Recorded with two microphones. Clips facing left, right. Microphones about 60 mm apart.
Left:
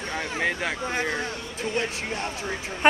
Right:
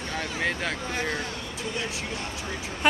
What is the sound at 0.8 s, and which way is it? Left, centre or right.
Speech, left.